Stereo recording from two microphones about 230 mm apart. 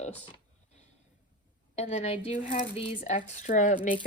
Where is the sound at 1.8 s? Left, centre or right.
Left.